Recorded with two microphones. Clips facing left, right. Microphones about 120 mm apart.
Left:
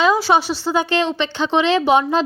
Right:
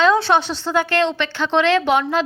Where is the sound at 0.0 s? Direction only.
5° left (ahead or behind).